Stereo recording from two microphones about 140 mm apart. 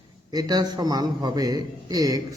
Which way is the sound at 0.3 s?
30° right (ahead or behind).